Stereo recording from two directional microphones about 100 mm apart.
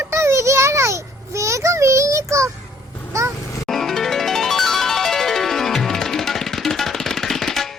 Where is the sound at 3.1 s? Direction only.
30° right (ahead or behind).